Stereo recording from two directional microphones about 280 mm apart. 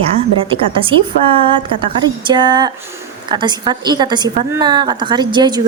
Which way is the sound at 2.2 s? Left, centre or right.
Centre.